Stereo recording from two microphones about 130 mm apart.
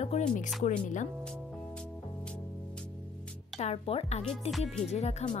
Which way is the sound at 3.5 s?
55° left (ahead or behind).